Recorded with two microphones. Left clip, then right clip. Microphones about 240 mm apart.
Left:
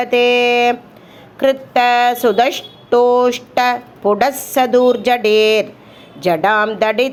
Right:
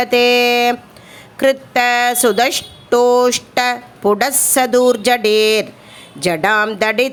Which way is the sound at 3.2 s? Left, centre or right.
Right.